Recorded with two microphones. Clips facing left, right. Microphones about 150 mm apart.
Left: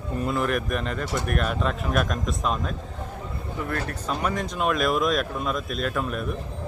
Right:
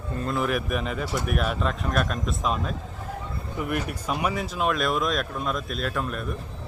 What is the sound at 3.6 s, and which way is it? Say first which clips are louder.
A man's voice: right 1 dB; 15° right (ahead or behind).